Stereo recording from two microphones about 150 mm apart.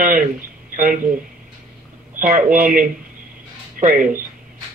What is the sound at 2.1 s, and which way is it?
A man's voice, 65° right (ahead or behind).